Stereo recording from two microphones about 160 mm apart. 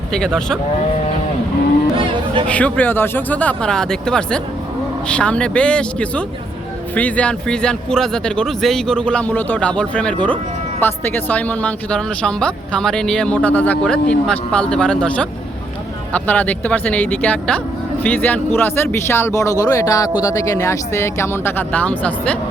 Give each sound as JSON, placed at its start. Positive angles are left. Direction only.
{"t": 0.1, "sound": "speech", "side_deg": 5}
{"t": 2.5, "sound": "speech", "side_deg": 10}